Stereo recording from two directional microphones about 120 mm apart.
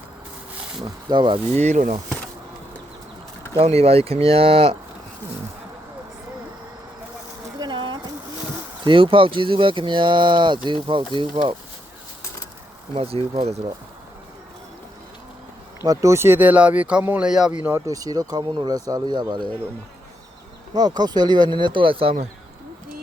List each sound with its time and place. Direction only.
1.0 s speech: 40° right (ahead or behind)
1.5 s speech: 80° right
3.5 s speech: 55° right (ahead or behind)
7.6 s a sound: 40° right (ahead or behind)
8.8 s speech: 45° right (ahead or behind)
12.9 s speech: 50° right (ahead or behind)
15.8 s speech: 25° right (ahead or behind); by 17.7 s 5° right (ahead or behind)
17.7 s speech: 25° right (ahead or behind)
20.7 s speech: 35° right (ahead or behind)